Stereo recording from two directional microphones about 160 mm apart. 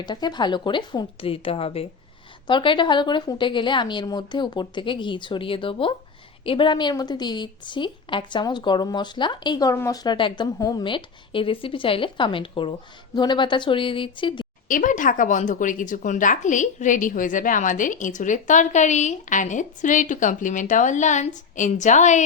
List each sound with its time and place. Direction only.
0.0 s a woman's voice: 25° left (ahead or behind)
14.7 s a woman's voice: 55° left (ahead or behind)